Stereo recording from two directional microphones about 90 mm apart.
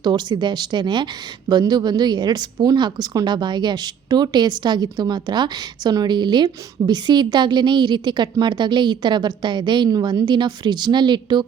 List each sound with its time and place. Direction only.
0.0 s speech: 55° right (ahead or behind)